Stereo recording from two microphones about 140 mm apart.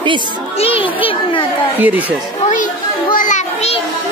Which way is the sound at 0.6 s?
40° left (ahead or behind).